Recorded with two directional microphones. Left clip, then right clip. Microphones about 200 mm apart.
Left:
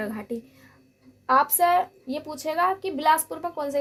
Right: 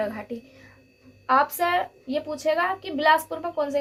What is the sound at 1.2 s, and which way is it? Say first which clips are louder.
A woman's voice: left 1 dB; 45° left (ahead or behind).